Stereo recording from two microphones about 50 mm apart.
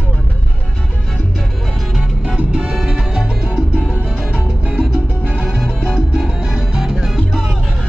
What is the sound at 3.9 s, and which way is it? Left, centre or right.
Music, right.